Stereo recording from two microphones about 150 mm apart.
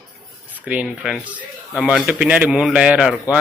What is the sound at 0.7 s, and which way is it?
A man's voice, 5° right (ahead or behind).